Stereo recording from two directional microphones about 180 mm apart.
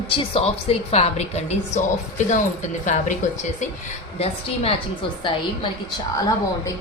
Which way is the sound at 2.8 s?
45° left (ahead or behind).